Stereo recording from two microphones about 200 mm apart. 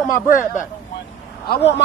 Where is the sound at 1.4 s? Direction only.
50° left (ahead or behind).